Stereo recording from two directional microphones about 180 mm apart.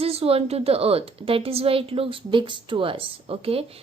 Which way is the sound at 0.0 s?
35° right (ahead or behind).